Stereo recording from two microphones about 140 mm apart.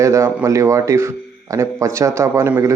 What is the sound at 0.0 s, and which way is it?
A man's voice, 20° right (ahead or behind).